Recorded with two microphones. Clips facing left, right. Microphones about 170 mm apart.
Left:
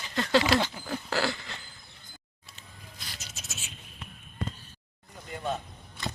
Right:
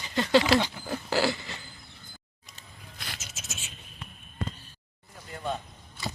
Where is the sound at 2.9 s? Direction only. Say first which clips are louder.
Right 5 dB; 65° right (ahead or behind).